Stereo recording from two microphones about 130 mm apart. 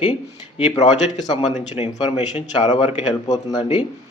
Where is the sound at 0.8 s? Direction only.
60° left (ahead or behind).